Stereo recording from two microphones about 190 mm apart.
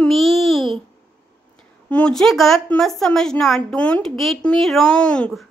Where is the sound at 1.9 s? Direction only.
5° left (ahead or behind).